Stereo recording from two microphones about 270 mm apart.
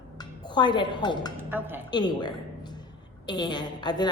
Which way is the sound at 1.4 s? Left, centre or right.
Centre.